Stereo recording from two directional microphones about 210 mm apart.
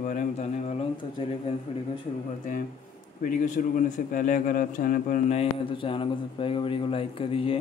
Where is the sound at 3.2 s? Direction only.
40° left (ahead or behind).